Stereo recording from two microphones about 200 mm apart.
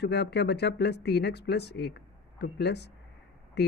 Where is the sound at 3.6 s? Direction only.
55° left (ahead or behind).